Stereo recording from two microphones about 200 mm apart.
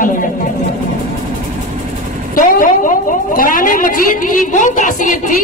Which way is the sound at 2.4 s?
40° left (ahead or behind).